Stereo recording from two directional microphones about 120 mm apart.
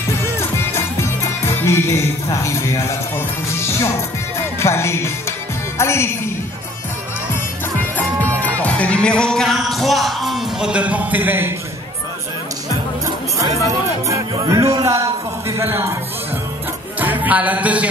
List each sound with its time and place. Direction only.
1.6 s speech: 20° left (ahead or behind)
4.6 s speech: 20° left (ahead or behind)
8.4 s music: 15° left (ahead or behind); by 11.5 s 15° right (ahead or behind)
13.7 s speech: 30° right (ahead or behind)
17.0 s music: 15° right (ahead or behind)